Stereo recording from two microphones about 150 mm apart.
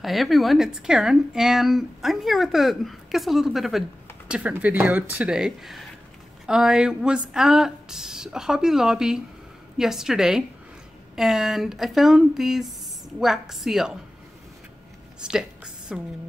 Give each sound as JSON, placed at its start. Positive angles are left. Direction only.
{"t": 0.0, "sound": "speech", "side_deg": 0}
{"t": 15.2, "sound": "a woman's voice", "side_deg": -5}